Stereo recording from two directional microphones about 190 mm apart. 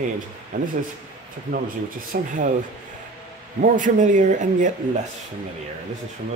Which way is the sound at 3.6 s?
45° right (ahead or behind).